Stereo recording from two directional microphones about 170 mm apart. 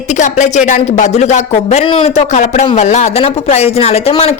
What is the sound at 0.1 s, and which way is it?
Speech, 45° left (ahead or behind).